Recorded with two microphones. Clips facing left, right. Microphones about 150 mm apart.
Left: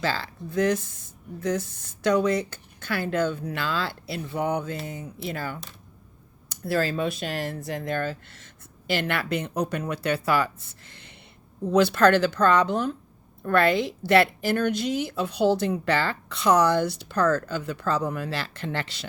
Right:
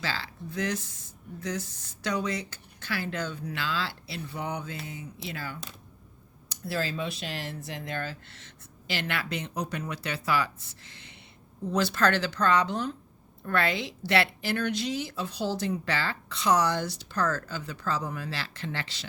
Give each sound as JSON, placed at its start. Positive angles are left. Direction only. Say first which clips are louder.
{"t": 0.0, "sound": "a woman's voice", "louder": "left 6 dB", "side_deg": 50}